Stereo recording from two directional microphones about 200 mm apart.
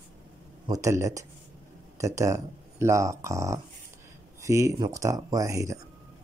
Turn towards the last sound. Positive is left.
turn(degrees=-15)  # may be behind; listen again after turning